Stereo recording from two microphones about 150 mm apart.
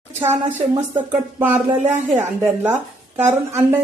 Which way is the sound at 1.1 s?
10° right (ahead or behind).